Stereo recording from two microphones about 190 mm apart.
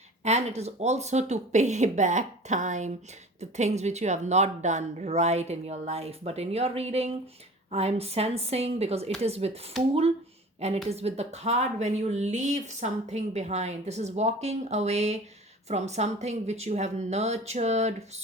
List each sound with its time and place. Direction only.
0.3 s a woman's voice: 35° right (ahead or behind)
10.8 s a woman's voice: 35° right (ahead or behind)